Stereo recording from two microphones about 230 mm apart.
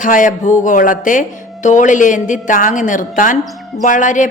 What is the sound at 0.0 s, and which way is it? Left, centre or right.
A woman's voice, left.